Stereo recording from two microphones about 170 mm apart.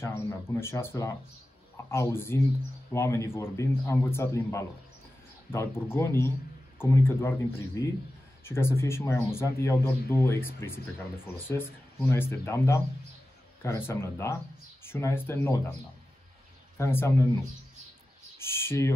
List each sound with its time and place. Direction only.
0.0 s speech: 15° left (ahead or behind)
16.7 s speech: 15° left (ahead or behind)
18.4 s a sound: 15° left (ahead or behind)